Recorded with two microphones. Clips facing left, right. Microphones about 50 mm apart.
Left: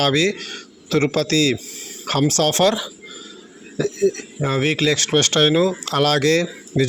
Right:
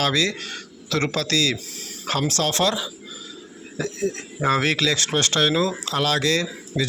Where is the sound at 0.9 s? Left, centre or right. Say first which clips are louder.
Left 5 dB; left.